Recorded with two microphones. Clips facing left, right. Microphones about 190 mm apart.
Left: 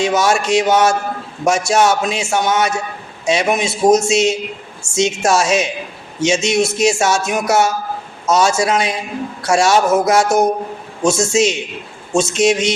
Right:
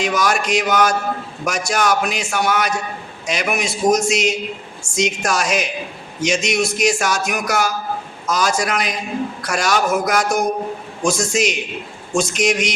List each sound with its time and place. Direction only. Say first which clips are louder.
0.0 s speech: left 4 dB; 25° left (ahead or behind)